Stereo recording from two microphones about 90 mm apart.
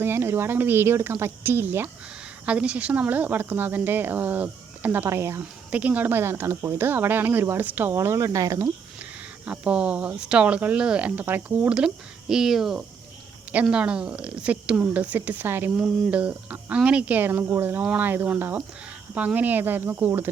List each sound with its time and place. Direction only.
0.0 s speech: 25° right (ahead or behind)
2.5 s speech: 15° right (ahead or behind)
5.0 s speech: 30° right (ahead or behind)
5.7 s speech: 15° right (ahead or behind); by 8.6 s 35° right (ahead or behind)
9.5 s speech: 10° right (ahead or behind)
13.5 s speech: 15° right (ahead or behind)